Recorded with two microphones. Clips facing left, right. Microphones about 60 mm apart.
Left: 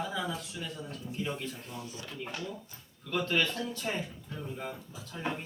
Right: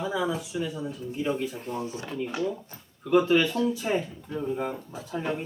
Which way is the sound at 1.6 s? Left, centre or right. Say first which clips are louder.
Right 10 dB; right.